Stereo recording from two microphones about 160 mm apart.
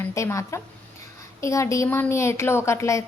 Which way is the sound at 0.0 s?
15° left (ahead or behind).